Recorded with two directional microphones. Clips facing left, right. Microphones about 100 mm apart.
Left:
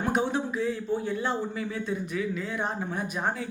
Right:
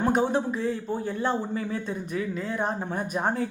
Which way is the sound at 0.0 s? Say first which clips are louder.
Right 3 dB; 40° right (ahead or behind).